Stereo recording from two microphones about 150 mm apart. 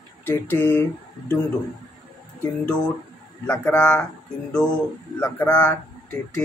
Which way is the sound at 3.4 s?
10° left (ahead or behind).